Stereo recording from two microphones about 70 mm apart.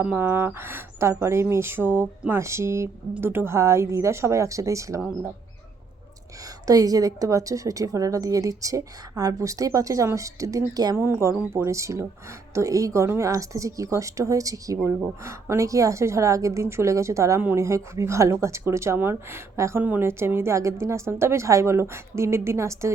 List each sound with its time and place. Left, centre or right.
0.0 s a woman's voice: right
6.7 s a woman's voice: right
10.9 s a woman's voice: right